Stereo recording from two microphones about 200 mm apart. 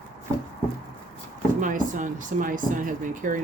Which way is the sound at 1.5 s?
40° right (ahead or behind).